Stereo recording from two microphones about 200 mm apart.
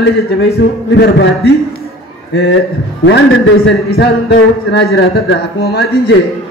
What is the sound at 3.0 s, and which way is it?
A man's voice, 70° left (ahead or behind).